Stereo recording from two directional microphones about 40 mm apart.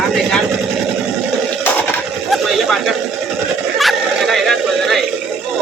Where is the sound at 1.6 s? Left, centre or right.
Left.